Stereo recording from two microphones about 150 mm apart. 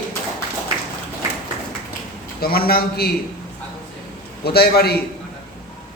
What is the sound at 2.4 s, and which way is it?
Speech, 90° left.